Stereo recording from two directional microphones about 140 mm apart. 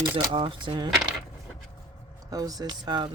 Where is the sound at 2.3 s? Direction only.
25° right (ahead or behind).